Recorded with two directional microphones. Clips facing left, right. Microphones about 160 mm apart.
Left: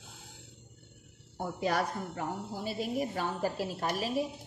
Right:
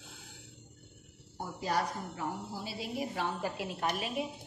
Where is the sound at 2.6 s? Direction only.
50° left (ahead or behind).